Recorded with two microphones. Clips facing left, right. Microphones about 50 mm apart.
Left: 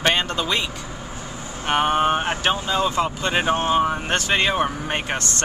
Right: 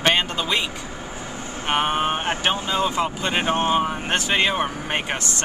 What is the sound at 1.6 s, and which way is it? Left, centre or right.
Speech, centre.